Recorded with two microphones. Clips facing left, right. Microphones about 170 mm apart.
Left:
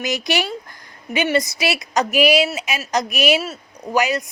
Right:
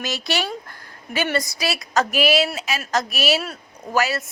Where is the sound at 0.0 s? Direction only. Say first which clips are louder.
Left 3 dB; 20° left (ahead or behind).